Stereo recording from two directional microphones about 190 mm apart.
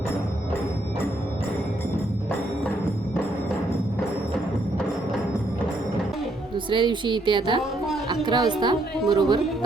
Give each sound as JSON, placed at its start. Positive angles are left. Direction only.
{"t": 6.7, "sound": "speech", "side_deg": -25}